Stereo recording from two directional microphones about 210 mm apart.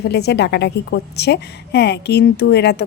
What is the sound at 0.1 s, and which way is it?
A woman's voice, 50° left (ahead or behind).